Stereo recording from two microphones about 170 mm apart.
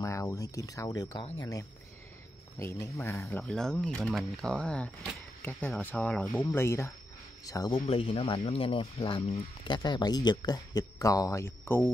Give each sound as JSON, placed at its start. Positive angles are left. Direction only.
{"t": 0.0, "sound": "speech", "side_deg": 20}
{"t": 7.8, "sound": "speech", "side_deg": 35}